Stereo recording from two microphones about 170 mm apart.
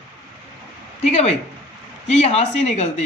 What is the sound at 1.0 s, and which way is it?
Speech, 40° left (ahead or behind).